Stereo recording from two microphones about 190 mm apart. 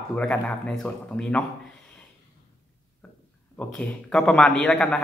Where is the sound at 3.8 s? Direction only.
5° left (ahead or behind).